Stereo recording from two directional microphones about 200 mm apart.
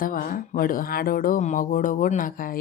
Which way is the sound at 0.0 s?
45° left (ahead or behind).